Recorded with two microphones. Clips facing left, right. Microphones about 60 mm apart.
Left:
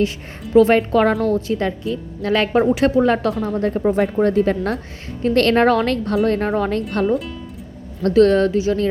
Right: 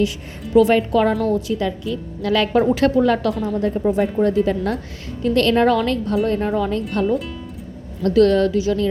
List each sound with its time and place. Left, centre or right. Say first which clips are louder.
0.5 s speech: left 1 dB; left
1.3 s a woman's voice: left 1 dB; left
3.8 s speech: left 2 dB; left
7.0 s speech: left 1 dB; centre
8.0 s a woman's voice: left 1 dB; left